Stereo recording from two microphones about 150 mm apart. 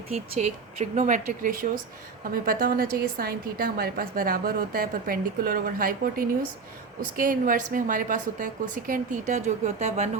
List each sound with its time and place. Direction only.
0.3 s a woman's voice: 50° right (ahead or behind)
2.3 s a woman's voice: 75° right (ahead or behind); by 10.1 s 50° right (ahead or behind)